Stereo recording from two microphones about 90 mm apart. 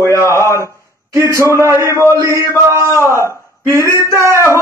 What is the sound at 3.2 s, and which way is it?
A man's voice, 35° right (ahead or behind).